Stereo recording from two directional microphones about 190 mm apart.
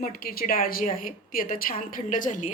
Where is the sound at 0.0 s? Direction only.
50° left (ahead or behind).